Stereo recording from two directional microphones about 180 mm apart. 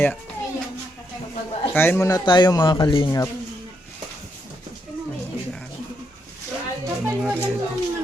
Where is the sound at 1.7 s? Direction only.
10° left (ahead or behind).